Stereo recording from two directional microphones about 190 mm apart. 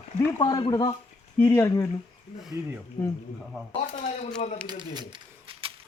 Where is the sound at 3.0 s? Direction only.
20° left (ahead or behind).